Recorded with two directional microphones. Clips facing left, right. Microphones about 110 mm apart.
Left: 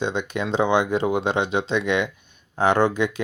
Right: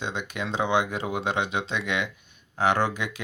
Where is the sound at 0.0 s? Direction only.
25° left (ahead or behind).